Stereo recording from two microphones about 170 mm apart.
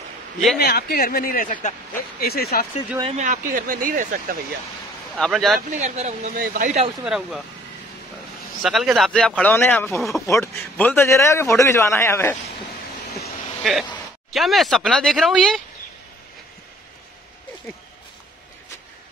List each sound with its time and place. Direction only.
0.6 s speech: 70° left (ahead or behind)
3.0 s speech: 40° right (ahead or behind)
5.1 s speech: centre (ahead or behind)
5.7 s speech: 40° right (ahead or behind)
6.3 s speech: 60° right (ahead or behind)
7.1 s speech: 5° right (ahead or behind)
8.6 s a man's voice: centre (ahead or behind); by 12.4 s 15° left (ahead or behind)
14.3 s speech: centre (ahead or behind)